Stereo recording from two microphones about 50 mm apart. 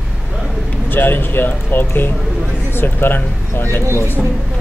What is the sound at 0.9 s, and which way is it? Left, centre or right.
Speech, left.